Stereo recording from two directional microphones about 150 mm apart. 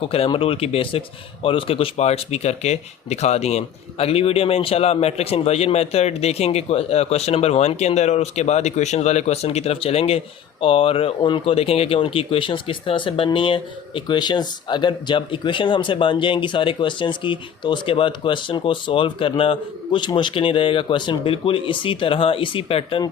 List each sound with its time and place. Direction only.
0.0 s speech: 40° left (ahead or behind)